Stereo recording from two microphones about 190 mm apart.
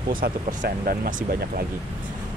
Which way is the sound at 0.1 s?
45° right (ahead or behind).